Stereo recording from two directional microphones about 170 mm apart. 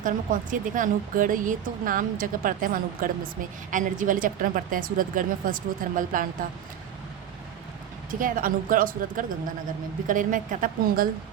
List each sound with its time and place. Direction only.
0.0 s speech: 50° right (ahead or behind)
8.2 s speech: 55° right (ahead or behind)